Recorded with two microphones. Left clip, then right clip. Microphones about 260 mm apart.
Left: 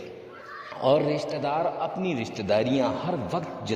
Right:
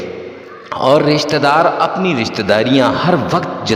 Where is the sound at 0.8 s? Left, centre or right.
Right.